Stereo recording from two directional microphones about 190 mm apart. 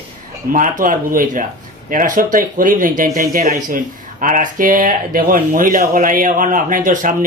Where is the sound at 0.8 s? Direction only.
45° right (ahead or behind).